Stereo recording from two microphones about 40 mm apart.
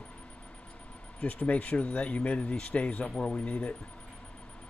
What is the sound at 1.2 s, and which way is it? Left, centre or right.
Speech, left.